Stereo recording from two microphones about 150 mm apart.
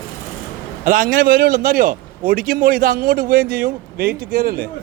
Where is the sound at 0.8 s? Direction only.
65° right (ahead or behind); by 4.6 s 90° right.